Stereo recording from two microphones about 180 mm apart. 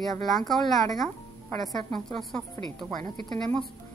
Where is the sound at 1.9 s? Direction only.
5° left (ahead or behind).